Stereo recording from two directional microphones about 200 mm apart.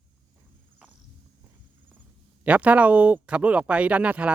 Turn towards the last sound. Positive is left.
turn(degrees=-5)  # may be behind; listen again after turning